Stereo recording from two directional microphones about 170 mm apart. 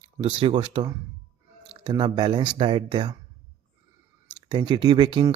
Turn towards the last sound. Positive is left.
turn(degrees=-30)  # may be behind; listen again after turning